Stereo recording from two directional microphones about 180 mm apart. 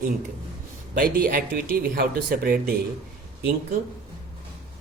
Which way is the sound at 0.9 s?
55° right (ahead or behind).